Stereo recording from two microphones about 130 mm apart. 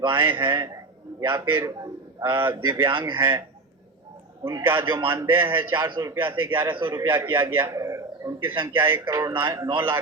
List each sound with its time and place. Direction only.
0.0 s a man's voice: 20° right (ahead or behind)
2.9 s a man's voice: 35° right (ahead or behind)
4.4 s a man's voice: 20° right (ahead or behind)
7.5 s a sound: 20° right (ahead or behind)
8.7 s a man's voice: 20° right (ahead or behind)